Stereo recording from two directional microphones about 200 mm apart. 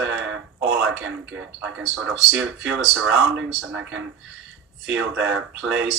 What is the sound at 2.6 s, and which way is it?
Speech, 65° right (ahead or behind).